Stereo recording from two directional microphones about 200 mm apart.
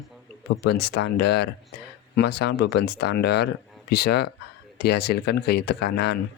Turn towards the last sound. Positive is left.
turn(degrees=55)  # may be behind; listen again after turning